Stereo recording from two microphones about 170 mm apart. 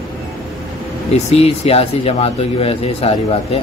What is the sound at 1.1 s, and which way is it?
Speech, 40° left (ahead or behind).